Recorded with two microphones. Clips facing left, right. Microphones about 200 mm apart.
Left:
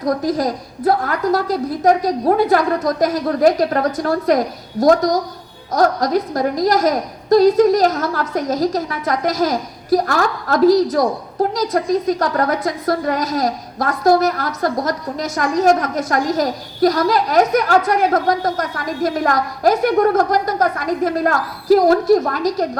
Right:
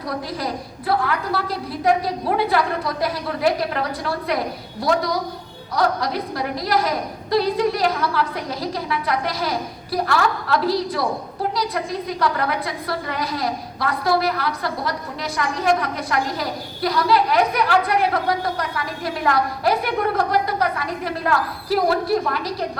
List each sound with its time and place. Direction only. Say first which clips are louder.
0.0 s a woman's voice: left 9 dB; 45° left (ahead or behind)